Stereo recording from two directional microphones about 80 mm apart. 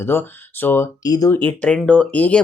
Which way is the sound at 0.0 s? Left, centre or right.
Left.